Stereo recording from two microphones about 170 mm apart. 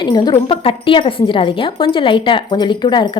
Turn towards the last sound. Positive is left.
turn(degrees=25)  # may be behind; listen again after turning